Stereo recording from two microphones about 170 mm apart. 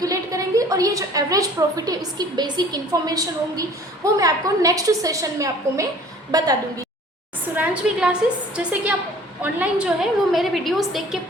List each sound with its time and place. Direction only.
0.0 s a woman's voice: 20° right (ahead or behind)
7.5 s a woman's voice: 10° right (ahead or behind)